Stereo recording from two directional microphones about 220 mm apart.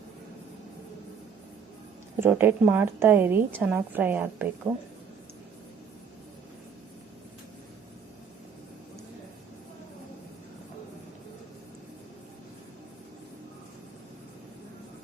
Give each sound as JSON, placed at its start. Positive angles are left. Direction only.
{"t": 2.1, "sound": "a woman's voice", "side_deg": -10}